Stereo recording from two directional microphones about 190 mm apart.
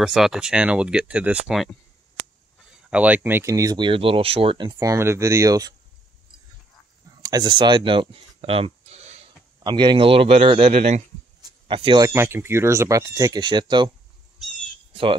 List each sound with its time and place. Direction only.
0.0 s speech: centre (ahead or behind)
2.9 s speech: 5° right (ahead or behind)
7.2 s speech: 20° right (ahead or behind)
9.6 s a man's voice: 25° right (ahead or behind)
11.4 s a sound: 25° right (ahead or behind)
12.1 s speech: 15° right (ahead or behind)